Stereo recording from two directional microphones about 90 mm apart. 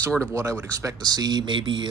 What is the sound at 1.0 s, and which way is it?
Speech, 50° right (ahead or behind).